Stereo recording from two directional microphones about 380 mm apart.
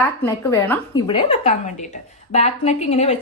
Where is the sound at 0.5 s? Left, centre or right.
Centre.